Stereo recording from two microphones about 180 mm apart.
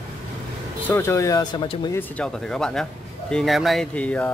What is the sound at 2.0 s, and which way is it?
Speech, 10° left (ahead or behind).